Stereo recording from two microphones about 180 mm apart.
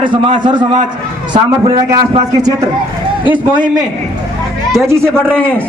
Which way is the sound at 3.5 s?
25° right (ahead or behind).